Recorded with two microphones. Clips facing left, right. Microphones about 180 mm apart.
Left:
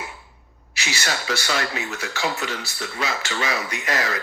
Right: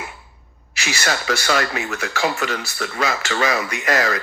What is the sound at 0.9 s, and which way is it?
Speech, 60° right (ahead or behind).